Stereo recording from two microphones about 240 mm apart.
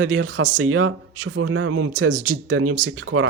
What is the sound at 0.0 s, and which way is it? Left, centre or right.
A man's voice, right.